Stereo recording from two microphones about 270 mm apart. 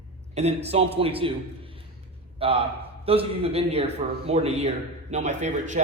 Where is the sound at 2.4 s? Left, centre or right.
Right.